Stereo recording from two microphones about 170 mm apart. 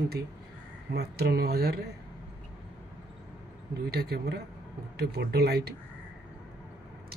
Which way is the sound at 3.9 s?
70° right (ahead or behind).